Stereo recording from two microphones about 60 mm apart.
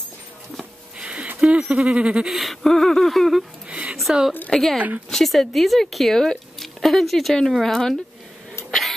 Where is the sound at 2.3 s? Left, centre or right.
Centre.